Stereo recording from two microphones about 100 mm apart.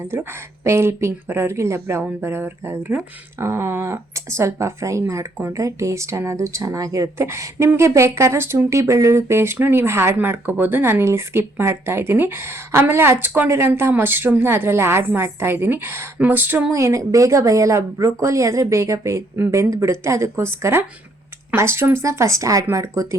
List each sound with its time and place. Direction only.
0.1 s speech: 20° right (ahead or behind)
16.7 s speech: 30° right (ahead or behind)